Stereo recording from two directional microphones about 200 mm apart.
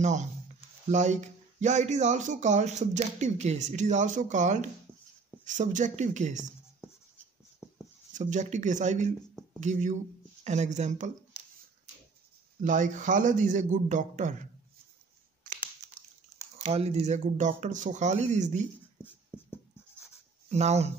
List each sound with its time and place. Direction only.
0.0 s speech: 35° right (ahead or behind)
8.1 s speech: 40° right (ahead or behind)
12.6 s speech: 40° right (ahead or behind)
16.5 s speech: 30° right (ahead or behind)
20.4 s speech: 35° right (ahead or behind)